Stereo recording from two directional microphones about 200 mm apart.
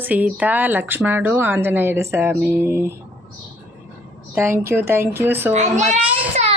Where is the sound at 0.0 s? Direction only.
10° right (ahead or behind).